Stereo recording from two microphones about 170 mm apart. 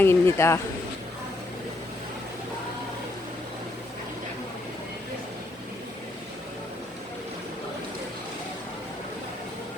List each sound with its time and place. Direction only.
0.0 s speech: 15° left (ahead or behind)